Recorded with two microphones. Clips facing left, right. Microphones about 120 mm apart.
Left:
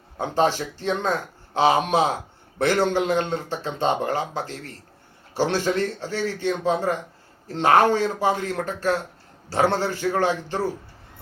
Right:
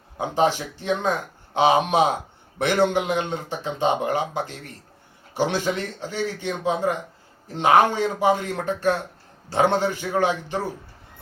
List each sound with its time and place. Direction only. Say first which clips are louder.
0.2 s speech: even; 15° right (ahead or behind)